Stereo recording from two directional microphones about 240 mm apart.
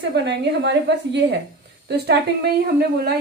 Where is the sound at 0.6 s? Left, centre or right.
Right.